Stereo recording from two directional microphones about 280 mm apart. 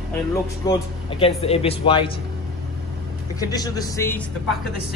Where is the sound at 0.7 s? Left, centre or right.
Centre.